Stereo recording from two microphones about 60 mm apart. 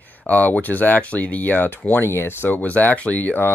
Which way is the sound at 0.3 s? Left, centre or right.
Left.